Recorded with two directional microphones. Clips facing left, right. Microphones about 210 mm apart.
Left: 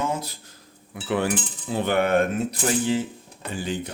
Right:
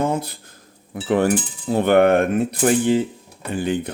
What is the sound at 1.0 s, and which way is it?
Cutlery, 45° right (ahead or behind).